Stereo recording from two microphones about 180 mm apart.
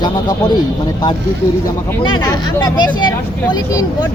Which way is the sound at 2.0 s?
25° left (ahead or behind).